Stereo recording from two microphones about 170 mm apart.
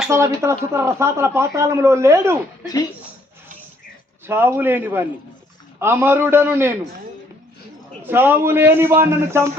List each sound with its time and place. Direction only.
0.1 s speech: 15° right (ahead or behind)
4.3 s speech: 15° right (ahead or behind)
8.0 s speech: 10° right (ahead or behind)